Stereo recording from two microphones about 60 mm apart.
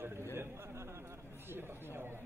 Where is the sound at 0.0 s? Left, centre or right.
Right.